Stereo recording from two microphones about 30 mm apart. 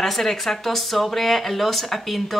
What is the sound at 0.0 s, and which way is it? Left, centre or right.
Speech, centre.